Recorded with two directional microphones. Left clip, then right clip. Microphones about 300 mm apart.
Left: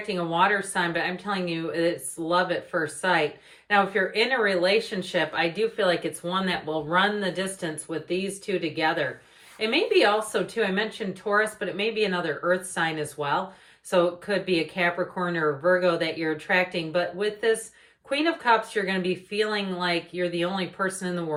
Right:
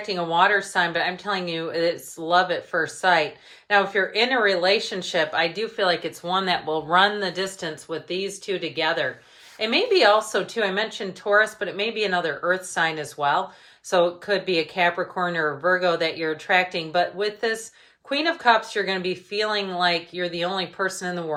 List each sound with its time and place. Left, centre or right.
0.1 s speech: centre